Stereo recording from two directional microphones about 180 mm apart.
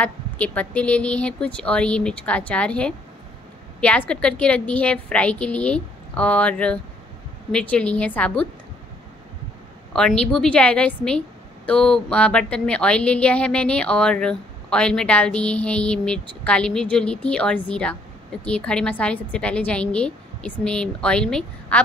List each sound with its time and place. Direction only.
0.0 s a woman's voice: 10° left (ahead or behind)
10.3 s a woman's voice: 5° left (ahead or behind)